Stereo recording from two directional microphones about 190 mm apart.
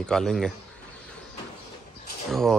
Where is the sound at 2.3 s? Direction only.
Centre (ahead or behind).